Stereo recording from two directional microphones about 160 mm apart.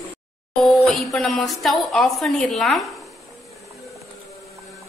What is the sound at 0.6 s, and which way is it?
Speech, centre (ahead or behind).